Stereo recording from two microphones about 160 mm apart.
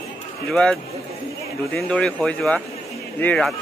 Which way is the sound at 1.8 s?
5° left (ahead or behind).